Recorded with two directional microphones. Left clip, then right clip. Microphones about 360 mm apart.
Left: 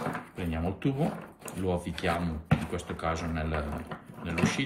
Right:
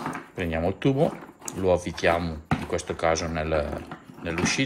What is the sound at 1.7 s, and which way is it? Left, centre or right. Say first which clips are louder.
Speech: right 9 dB; centre.